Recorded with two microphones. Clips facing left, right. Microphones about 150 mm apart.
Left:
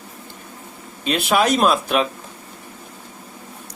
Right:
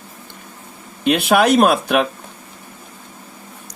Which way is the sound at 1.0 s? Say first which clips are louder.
Right 4 dB; 65° right (ahead or behind).